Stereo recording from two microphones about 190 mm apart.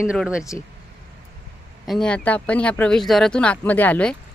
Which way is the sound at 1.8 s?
5° left (ahead or behind).